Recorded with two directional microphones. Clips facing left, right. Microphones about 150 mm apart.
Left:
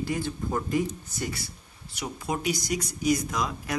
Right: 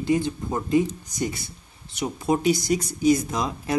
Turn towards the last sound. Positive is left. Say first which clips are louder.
# right 4 dB
turn(degrees=-25)  # may be behind; listen again after turning